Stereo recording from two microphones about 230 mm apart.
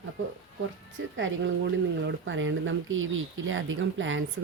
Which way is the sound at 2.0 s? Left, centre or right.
Right.